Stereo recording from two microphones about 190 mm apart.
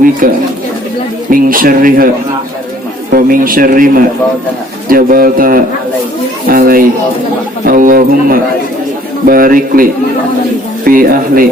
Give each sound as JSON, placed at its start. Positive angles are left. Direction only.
{"t": 0.2, "sound": "a man's voice", "side_deg": -45}
{"t": 3.1, "sound": "a man's voice", "side_deg": -50}